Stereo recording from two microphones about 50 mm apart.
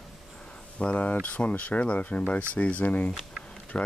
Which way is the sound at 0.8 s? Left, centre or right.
Left.